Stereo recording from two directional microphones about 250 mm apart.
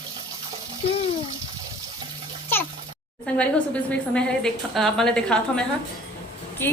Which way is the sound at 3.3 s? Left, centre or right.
Centre.